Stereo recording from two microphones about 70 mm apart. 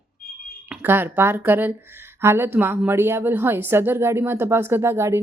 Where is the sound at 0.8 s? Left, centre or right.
Right.